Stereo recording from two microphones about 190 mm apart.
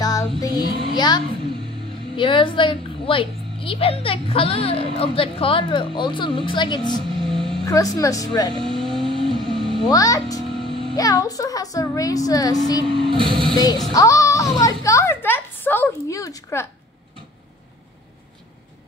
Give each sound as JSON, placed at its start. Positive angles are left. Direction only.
{"t": 0.0, "sound": "music", "side_deg": 20}
{"t": 0.9, "sound": "a woman's voice", "side_deg": 20}
{"t": 7.2, "sound": "a sound", "side_deg": -25}
{"t": 7.6, "sound": "speech", "side_deg": 20}
{"t": 8.5, "sound": "vehicle", "side_deg": -25}
{"t": 9.8, "sound": "speech", "side_deg": 15}
{"t": 10.5, "sound": "music", "side_deg": -30}
{"t": 11.0, "sound": "a woman's voice", "side_deg": 20}
{"t": 12.9, "sound": "speech", "side_deg": -25}
{"t": 13.9, "sound": "a child's voice", "side_deg": 15}